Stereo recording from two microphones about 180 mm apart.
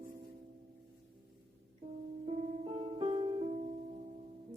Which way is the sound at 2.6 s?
30° right (ahead or behind).